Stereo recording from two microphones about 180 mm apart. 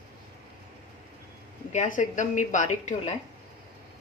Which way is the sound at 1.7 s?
45° left (ahead or behind).